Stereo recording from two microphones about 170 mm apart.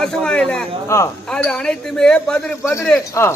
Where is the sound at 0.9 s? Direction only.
15° left (ahead or behind).